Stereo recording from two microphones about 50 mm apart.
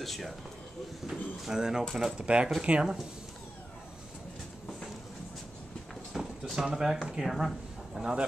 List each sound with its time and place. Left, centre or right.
0.0 s speech: centre
1.0 s speech: centre
6.1 s a sound: centre
6.6 s speech: centre